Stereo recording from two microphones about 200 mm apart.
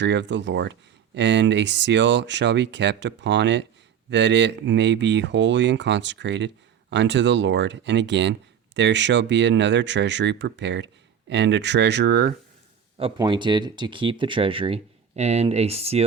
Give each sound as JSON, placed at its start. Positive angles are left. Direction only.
{"t": 0.0, "sound": "speech", "side_deg": -60}
{"t": 13.0, "sound": "speech", "side_deg": -25}